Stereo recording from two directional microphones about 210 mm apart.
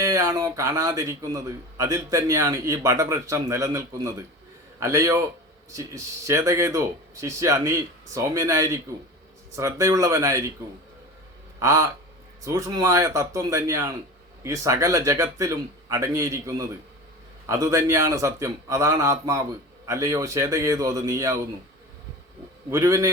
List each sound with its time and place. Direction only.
0.1 s a man's voice: 15° right (ahead or behind)
11.6 s a man's voice: 15° right (ahead or behind)
22.7 s a man's voice: 15° right (ahead or behind)